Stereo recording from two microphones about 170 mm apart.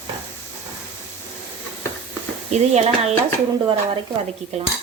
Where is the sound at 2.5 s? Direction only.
40° right (ahead or behind).